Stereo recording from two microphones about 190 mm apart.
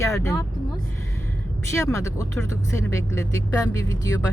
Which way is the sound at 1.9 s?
15° left (ahead or behind).